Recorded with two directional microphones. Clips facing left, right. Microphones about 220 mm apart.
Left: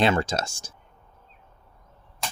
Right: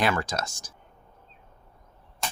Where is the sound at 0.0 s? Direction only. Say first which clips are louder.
Left 4 dB; 25° left (ahead or behind).